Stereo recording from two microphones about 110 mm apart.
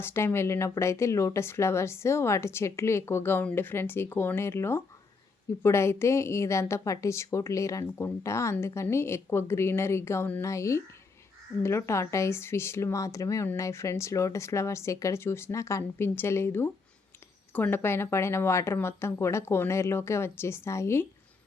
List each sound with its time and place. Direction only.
0.0 s speech: 25° left (ahead or behind)